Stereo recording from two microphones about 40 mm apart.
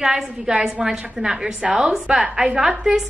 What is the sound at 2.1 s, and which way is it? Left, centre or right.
Speech, right.